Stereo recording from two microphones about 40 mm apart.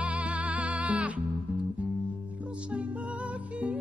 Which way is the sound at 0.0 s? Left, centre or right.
Right.